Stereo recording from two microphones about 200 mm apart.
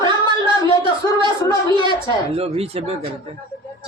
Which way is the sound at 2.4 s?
30° right (ahead or behind).